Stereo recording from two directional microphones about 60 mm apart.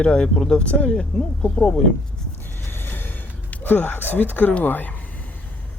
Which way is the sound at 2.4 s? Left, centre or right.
Left.